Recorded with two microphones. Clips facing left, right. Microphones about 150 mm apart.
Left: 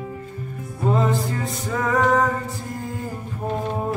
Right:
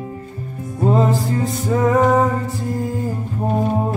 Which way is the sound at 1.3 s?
25° right (ahead or behind).